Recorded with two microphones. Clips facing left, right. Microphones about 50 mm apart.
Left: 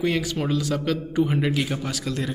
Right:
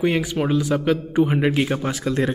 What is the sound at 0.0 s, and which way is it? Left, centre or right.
Speech, right.